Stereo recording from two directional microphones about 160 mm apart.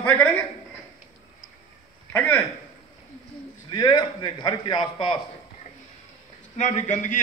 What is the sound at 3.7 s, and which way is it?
A man's voice, 25° left (ahead or behind).